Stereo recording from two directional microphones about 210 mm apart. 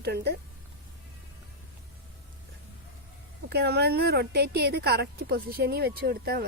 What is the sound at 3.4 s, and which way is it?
A woman's voice, 50° right (ahead or behind).